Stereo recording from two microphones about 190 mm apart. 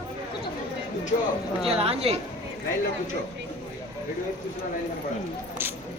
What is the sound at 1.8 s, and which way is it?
Speech, 30° right (ahead or behind).